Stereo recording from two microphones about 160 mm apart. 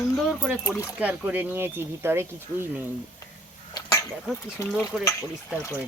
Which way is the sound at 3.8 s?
20° left (ahead or behind).